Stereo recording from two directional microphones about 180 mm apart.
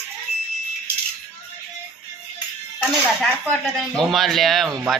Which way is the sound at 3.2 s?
5° left (ahead or behind).